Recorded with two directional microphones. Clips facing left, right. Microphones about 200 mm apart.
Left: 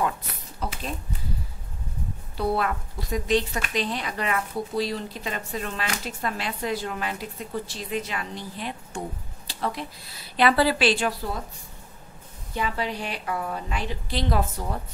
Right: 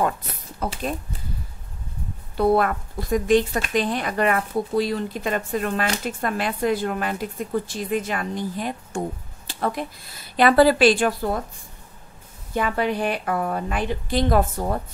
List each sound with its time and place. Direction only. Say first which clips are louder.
0.6 s a woman's voice: right 4 dB; 50° right (ahead or behind)
2.3 s a woman's voice: right 6 dB; 50° right (ahead or behind)
12.5 s a woman's voice: right 6 dB; 55° right (ahead or behind)